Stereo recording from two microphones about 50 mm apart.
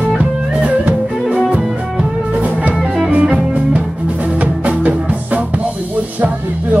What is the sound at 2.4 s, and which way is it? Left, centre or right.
Music, right.